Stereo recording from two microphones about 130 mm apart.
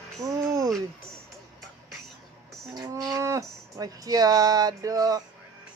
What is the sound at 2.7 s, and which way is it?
Speech, 25° right (ahead or behind).